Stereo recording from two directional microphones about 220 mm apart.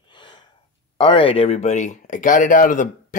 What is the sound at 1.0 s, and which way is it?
Speech, 25° left (ahead or behind).